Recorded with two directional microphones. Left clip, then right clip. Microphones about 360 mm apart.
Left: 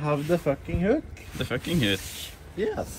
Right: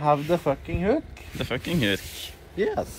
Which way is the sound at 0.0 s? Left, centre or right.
Right.